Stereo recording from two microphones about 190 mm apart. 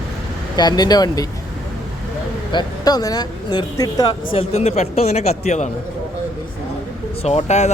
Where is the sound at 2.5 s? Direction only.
20° left (ahead or behind); by 5.7 s 40° left (ahead or behind).